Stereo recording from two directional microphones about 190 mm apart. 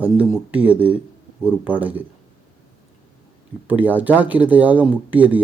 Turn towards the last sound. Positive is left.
turn(degrees=-10)  # may be behind; listen again after turning